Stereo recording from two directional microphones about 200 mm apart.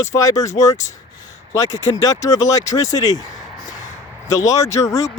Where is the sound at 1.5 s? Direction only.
15° left (ahead or behind).